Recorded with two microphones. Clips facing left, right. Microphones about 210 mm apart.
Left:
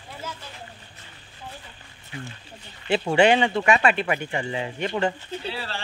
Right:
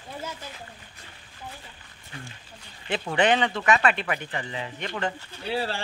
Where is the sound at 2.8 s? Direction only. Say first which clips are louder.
Left 5 dB; 25° left (ahead or behind).